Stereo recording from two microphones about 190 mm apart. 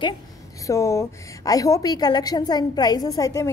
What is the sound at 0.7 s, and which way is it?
A woman's voice, 15° left (ahead or behind).